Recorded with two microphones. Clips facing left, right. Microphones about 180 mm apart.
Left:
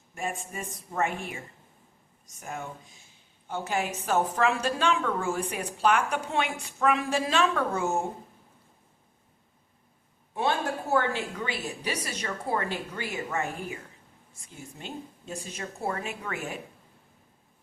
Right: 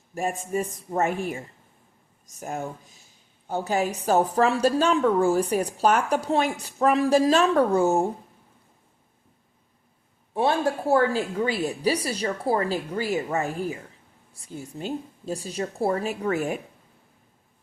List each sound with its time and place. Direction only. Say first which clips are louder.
0.1 s speech: right 6 dB; 40° right (ahead or behind)
0.6 s a woman's voice: right 8 dB; centre (ahead or behind)
0.9 s a woman's voice: right 3 dB; 35° right (ahead or behind)
2.4 s a woman's voice: right 6 dB; 40° right (ahead or behind)
10.3 s a woman's voice: right 5 dB; 30° right (ahead or behind)